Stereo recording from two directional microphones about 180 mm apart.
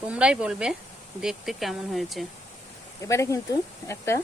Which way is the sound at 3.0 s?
15° left (ahead or behind).